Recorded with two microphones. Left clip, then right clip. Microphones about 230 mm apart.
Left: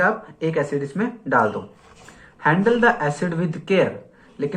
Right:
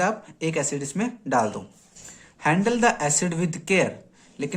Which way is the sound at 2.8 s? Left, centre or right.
Right.